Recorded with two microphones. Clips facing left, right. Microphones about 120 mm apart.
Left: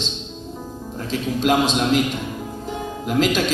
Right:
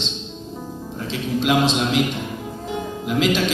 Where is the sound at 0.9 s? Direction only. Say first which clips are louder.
Even; 45° left (ahead or behind).